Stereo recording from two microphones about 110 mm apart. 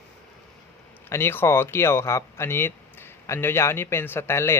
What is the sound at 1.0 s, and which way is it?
Speech, 20° left (ahead or behind).